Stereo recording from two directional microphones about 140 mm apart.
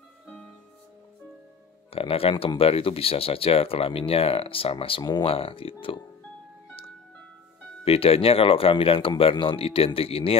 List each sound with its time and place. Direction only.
1.9 s speech: 45° left (ahead or behind)
7.8 s speech: 45° left (ahead or behind)